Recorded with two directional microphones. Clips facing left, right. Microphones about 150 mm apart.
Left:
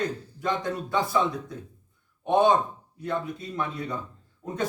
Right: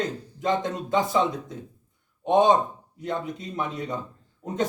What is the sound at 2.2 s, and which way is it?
Speech, 20° right (ahead or behind).